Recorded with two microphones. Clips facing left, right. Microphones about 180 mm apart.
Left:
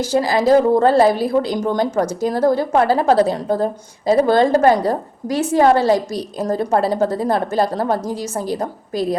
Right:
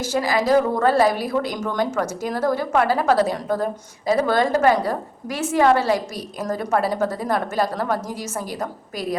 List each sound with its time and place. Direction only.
0.1 s a woman's voice: 35° left (ahead or behind)
4.5 s a woman's voice: 40° left (ahead or behind)